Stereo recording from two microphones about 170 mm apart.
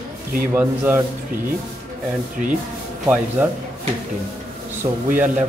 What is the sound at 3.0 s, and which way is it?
Speech, 10° right (ahead or behind).